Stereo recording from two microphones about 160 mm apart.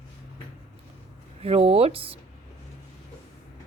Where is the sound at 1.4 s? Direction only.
40° right (ahead or behind).